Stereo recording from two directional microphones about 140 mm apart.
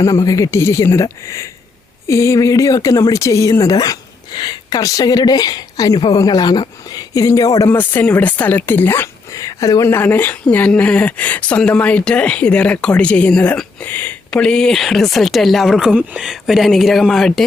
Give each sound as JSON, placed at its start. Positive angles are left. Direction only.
{"t": 0.0, "sound": "speech", "side_deg": 25}